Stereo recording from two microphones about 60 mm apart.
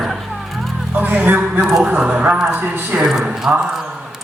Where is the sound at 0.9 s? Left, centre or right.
Right.